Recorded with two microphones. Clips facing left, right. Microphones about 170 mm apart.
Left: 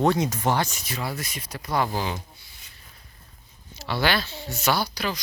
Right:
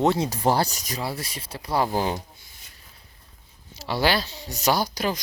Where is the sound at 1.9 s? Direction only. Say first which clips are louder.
Right 4 dB; 45° right (ahead or behind).